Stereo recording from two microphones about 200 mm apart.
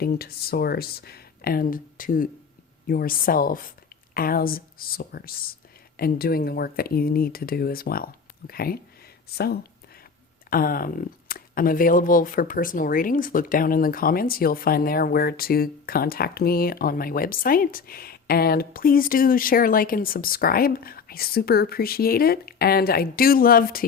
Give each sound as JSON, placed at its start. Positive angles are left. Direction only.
{"t": 0.0, "sound": "speech", "side_deg": 50}